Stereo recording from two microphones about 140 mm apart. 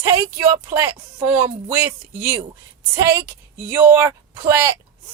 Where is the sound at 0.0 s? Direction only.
20° right (ahead or behind).